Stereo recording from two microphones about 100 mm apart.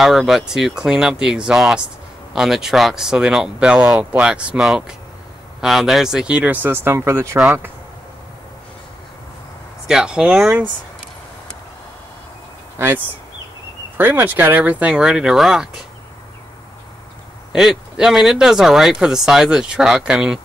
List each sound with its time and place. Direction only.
0.0 s speech: centre (ahead or behind); by 7.7 s 25° right (ahead or behind)
9.8 s speech: 5° right (ahead or behind)
12.7 s speech: 20° right (ahead or behind); by 15.8 s 5° right (ahead or behind)
17.5 s speech: 5° right (ahead or behind)